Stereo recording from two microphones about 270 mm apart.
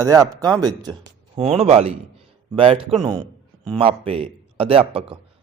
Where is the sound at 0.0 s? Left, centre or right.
Centre.